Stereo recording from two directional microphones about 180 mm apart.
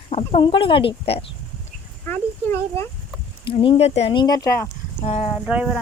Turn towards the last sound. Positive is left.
turn(degrees=-5)  # may be behind; listen again after turning